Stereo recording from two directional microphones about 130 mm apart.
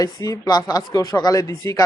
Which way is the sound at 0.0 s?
30° left (ahead or behind).